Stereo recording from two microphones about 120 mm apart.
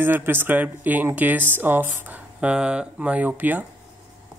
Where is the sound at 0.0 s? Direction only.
20° right (ahead or behind).